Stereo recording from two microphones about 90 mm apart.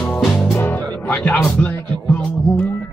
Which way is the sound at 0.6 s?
15° left (ahead or behind).